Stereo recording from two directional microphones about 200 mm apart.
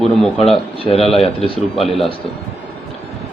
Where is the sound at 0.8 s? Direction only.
30° left (ahead or behind).